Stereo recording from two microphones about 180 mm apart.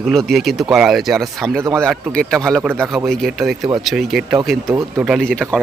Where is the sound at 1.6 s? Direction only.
15° right (ahead or behind).